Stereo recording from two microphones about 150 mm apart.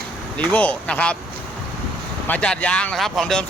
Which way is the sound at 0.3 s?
10° left (ahead or behind).